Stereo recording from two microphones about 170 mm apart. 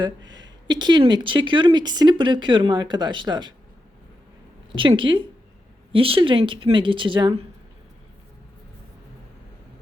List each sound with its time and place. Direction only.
0.0 s speech: 25° right (ahead or behind)
4.7 s speech: 30° right (ahead or behind)